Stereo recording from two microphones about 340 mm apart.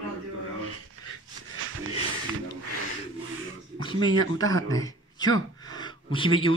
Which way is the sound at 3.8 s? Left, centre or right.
Centre.